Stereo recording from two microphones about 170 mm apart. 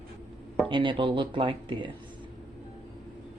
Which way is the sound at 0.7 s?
30° right (ahead or behind).